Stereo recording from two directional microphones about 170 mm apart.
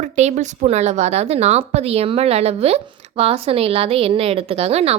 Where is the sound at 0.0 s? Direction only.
45° right (ahead or behind).